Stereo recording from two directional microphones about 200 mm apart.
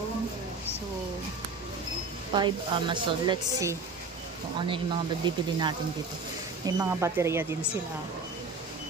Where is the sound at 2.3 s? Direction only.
25° right (ahead or behind).